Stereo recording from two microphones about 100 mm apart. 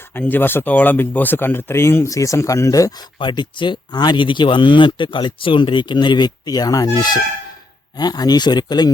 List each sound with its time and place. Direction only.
0.1 s speech: 20° left (ahead or behind)
3.2 s speech: 55° left (ahead or behind)
7.9 s speech: 40° left (ahead or behind)